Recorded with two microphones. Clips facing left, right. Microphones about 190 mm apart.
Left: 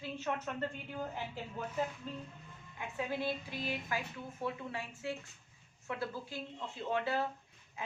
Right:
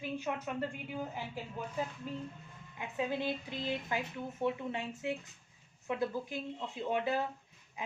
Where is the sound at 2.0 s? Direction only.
10° right (ahead or behind).